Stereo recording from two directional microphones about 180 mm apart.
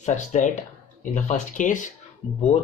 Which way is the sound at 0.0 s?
40° left (ahead or behind).